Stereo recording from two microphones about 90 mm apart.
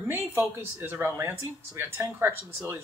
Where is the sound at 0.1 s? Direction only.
25° right (ahead or behind).